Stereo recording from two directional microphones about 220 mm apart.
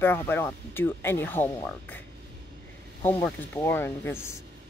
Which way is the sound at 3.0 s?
10° left (ahead or behind).